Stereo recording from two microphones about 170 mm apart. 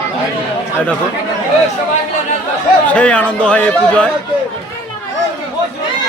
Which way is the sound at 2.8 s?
5° left (ahead or behind).